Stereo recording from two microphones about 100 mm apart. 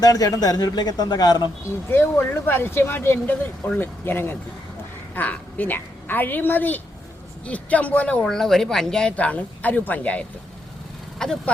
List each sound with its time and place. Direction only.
0.0 s speech: 35° left (ahead or behind)
1.9 s a woman's voice: 20° left (ahead or behind)